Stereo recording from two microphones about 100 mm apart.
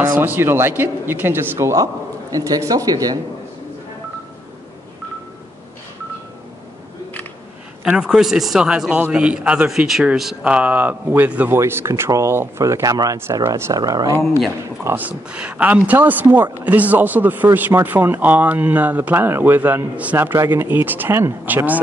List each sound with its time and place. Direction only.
0.2 s speech: 20° right (ahead or behind); by 3.2 s 40° right (ahead or behind)
8.0 s a man's voice: 5° right (ahead or behind)
9.7 s speech: centre (ahead or behind)
10.4 s a man's voice: 15° right (ahead or behind); by 14.1 s 40° right (ahead or behind)
15.0 s a man's voice: 15° right (ahead or behind)